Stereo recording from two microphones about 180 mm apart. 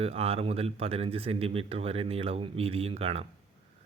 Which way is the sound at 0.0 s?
35° right (ahead or behind).